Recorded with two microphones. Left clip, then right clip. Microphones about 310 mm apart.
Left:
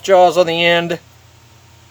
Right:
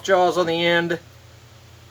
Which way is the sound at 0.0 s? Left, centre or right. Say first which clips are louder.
Left 8 dB; left.